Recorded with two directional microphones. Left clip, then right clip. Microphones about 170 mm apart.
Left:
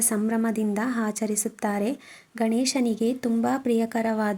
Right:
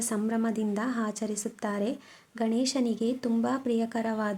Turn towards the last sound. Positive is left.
turn(degrees=15)  # may be behind; listen again after turning